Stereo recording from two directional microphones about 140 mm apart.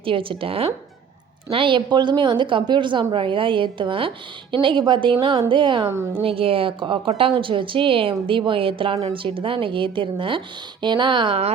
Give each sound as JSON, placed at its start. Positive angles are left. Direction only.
{"t": 0.0, "sound": "a woman's voice", "side_deg": -40}